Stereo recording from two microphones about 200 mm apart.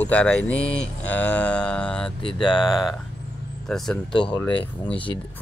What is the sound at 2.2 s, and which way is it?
Speech, 25° left (ahead or behind).